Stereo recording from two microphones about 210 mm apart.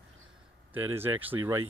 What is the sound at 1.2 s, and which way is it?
Speech, 10° right (ahead or behind).